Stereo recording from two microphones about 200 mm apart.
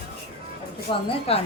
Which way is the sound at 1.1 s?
30° left (ahead or behind).